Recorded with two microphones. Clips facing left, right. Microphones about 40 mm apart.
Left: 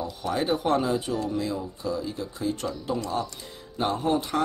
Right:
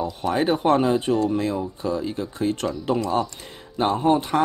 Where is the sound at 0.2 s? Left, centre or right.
Right.